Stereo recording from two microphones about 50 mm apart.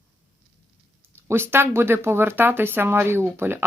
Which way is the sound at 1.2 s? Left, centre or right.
Right.